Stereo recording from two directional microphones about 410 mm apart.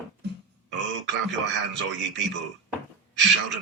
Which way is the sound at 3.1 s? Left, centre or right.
Right.